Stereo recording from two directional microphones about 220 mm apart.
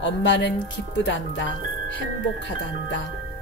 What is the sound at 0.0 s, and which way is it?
Speech, 55° left (ahead or behind).